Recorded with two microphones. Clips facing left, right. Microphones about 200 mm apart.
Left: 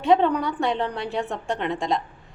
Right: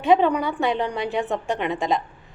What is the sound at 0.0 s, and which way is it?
A woman's voice, 10° right (ahead or behind).